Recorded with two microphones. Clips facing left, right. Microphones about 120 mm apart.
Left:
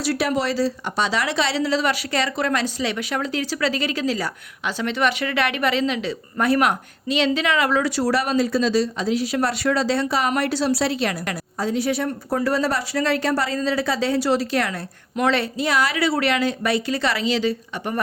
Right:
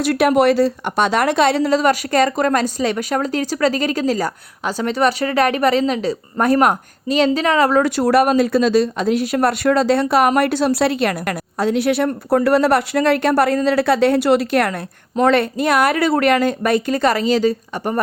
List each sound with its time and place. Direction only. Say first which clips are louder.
0.0 s speech: right 8 dB; 55° right (ahead or behind)